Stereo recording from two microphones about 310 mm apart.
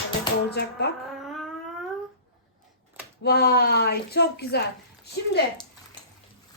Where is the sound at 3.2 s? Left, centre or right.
Left.